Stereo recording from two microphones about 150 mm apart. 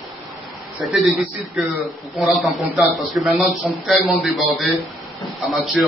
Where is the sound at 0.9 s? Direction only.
Centre (ahead or behind).